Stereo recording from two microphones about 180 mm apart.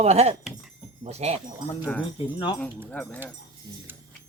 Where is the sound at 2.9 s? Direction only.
10° left (ahead or behind).